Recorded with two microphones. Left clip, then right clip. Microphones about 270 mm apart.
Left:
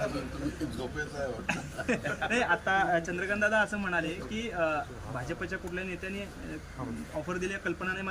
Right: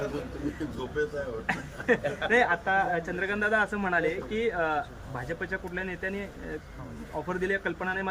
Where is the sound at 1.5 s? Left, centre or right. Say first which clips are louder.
Right 8 dB; centre.